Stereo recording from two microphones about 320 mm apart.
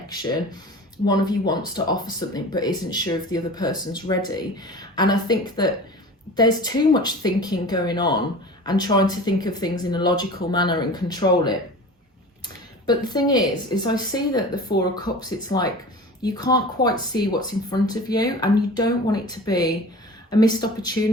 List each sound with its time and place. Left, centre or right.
0.1 s speech: centre
12.8 s speech: centre